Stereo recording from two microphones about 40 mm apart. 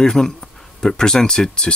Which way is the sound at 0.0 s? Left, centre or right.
Centre.